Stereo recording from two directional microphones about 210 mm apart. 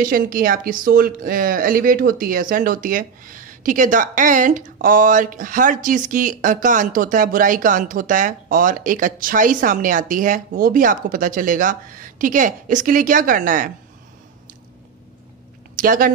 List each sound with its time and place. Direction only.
0.0 s speech: 40° right (ahead or behind)
15.7 s speech: 40° right (ahead or behind)